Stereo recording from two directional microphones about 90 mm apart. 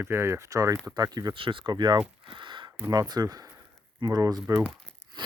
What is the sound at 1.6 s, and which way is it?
Speech, 55° right (ahead or behind).